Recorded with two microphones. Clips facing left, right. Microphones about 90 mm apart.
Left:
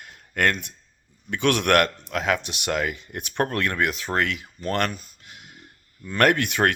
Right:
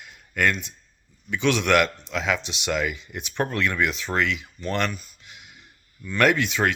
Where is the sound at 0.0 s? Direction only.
50° left (ahead or behind).